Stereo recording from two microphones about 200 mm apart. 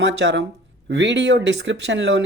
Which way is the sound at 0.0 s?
60° right (ahead or behind).